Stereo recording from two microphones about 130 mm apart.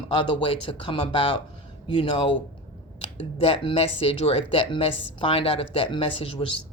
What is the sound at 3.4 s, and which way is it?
Speech, 45° left (ahead or behind).